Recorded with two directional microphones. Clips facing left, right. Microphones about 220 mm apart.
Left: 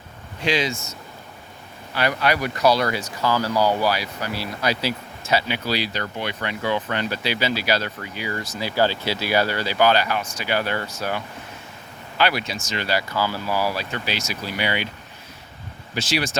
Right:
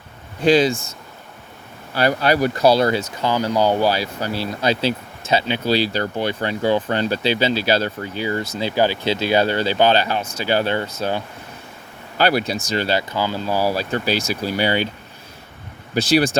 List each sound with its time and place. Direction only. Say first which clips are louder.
0.5 s speech: right 8 dB; 30° right (ahead or behind)
2.0 s speech: right 5 dB; 35° right (ahead or behind)
12.1 s speech: right 5 dB; 40° right (ahead or behind)
16.0 s speech: right 8 dB; 35° right (ahead or behind)